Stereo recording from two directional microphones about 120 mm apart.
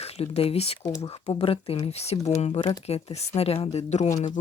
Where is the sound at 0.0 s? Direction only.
60° left (ahead or behind).